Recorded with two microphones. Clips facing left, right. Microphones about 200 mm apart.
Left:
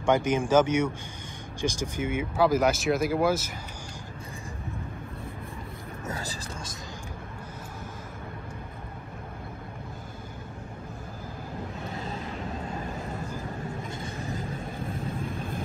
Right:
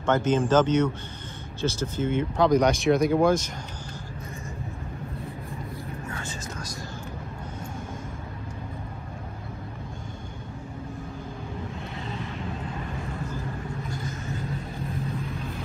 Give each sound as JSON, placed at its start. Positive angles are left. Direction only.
{"t": 0.0, "sound": "speech", "side_deg": 10}
{"t": 6.1, "sound": "a sound", "side_deg": 35}
{"t": 13.8, "sound": "vehicle", "side_deg": 30}